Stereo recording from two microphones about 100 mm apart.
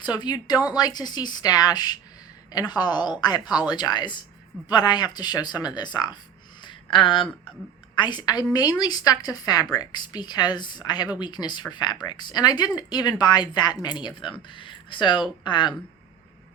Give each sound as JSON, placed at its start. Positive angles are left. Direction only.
{"t": 0.0, "sound": "a woman's voice", "side_deg": 45}
{"t": 6.6, "sound": "a sound", "side_deg": 55}
{"t": 7.9, "sound": "a woman's voice", "side_deg": 50}